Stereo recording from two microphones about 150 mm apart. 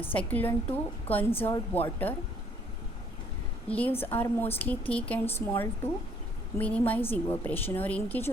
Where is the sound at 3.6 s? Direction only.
10° left (ahead or behind).